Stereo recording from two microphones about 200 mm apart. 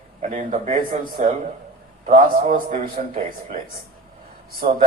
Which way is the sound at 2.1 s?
40° right (ahead or behind).